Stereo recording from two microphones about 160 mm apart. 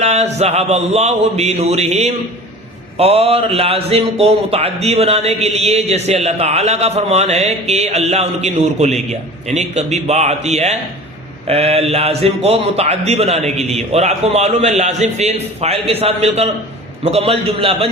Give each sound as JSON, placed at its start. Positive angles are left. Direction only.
{"t": 0.0, "sound": "a man's voice", "side_deg": -40}